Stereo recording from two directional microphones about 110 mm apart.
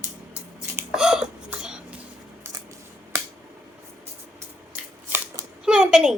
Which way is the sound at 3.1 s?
25° right (ahead or behind).